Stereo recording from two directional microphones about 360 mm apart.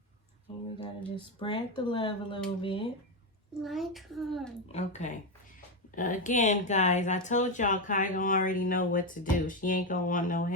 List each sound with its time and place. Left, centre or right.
0.8 s speech: centre
3.6 s a child's voice: centre
4.7 s speech: centre